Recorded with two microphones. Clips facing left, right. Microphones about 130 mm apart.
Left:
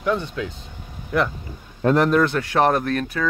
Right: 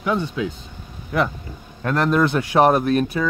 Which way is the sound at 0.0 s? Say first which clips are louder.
Right 1 dB; 5° right (ahead or behind).